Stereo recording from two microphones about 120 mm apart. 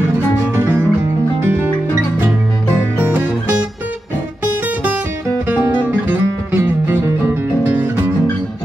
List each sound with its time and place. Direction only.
0.6 s music: 20° right (ahead or behind)
5.5 s music: 15° right (ahead or behind)